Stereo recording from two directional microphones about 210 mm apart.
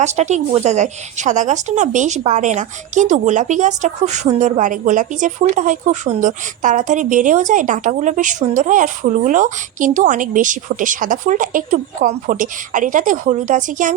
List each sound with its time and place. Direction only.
0.0 s speech: 35° right (ahead or behind)